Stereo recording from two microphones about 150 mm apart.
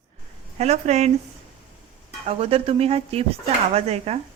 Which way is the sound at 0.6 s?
50° right (ahead or behind).